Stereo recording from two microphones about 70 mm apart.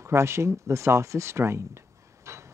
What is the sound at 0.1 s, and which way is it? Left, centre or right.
Speech, right.